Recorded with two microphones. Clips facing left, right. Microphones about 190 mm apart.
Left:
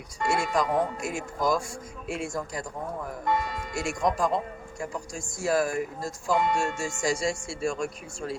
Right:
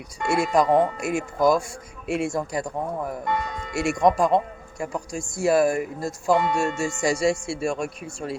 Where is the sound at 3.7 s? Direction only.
70° right (ahead or behind).